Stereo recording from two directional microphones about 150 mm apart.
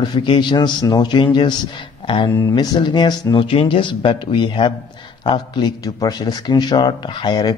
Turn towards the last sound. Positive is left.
turn(degrees=30)  # may be behind; listen again after turning